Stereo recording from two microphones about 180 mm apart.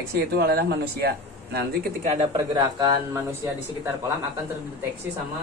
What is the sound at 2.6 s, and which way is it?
Speech, 20° right (ahead or behind).